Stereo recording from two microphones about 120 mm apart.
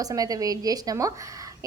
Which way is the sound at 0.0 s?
30° right (ahead or behind).